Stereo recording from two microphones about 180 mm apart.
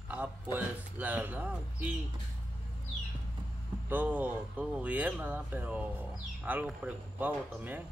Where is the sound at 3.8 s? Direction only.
10° right (ahead or behind).